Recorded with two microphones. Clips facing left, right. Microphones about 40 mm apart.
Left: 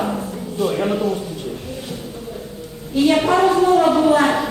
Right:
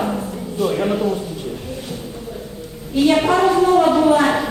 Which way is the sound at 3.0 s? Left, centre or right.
Centre.